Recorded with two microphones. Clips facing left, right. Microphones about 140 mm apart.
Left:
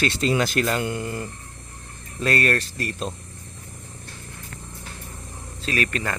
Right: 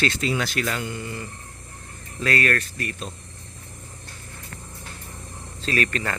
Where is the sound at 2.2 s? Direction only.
25° left (ahead or behind).